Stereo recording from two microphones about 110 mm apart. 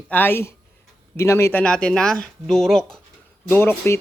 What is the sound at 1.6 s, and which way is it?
Speech, 10° left (ahead or behind).